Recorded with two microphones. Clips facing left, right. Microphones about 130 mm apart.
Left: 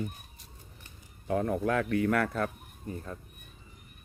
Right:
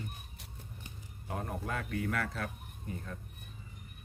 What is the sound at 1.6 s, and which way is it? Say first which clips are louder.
Speech: left 9 dB; 85° left.